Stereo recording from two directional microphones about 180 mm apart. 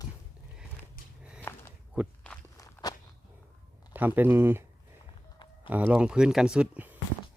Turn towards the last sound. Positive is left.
turn(degrees=-5)  # may be behind; listen again after turning